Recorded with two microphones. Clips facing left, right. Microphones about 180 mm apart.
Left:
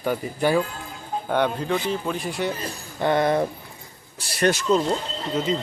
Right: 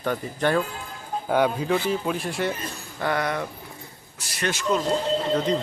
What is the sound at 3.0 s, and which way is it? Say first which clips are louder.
Speech: left 6 dB; 25° left (ahead or behind).